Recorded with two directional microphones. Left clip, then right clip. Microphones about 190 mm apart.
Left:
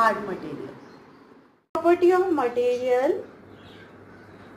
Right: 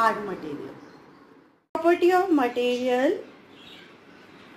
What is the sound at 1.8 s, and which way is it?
Speech, 30° right (ahead or behind).